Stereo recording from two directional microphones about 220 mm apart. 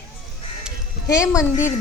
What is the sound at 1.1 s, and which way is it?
Speech, 15° left (ahead or behind).